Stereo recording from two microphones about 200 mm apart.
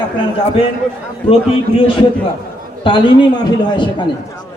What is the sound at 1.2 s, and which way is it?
Speech, 25° left (ahead or behind).